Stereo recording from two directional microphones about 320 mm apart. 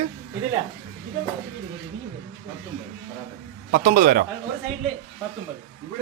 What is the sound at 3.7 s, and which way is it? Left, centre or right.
Speech, right.